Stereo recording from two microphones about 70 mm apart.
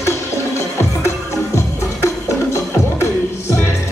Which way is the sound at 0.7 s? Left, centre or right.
Left.